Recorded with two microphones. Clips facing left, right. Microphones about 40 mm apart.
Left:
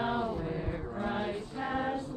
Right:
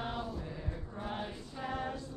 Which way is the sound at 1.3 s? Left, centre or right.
Left.